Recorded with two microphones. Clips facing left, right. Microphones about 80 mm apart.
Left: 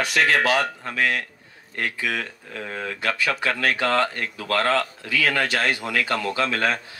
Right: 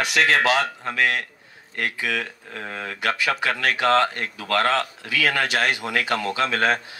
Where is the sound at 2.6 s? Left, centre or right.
Right.